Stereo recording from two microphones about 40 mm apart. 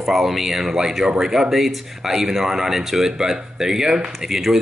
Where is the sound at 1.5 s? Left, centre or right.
Centre.